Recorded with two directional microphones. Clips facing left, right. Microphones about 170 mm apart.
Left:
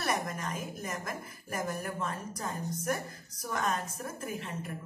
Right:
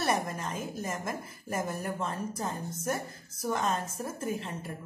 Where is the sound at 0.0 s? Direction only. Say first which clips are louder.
Right 3 dB; 30° right (ahead or behind).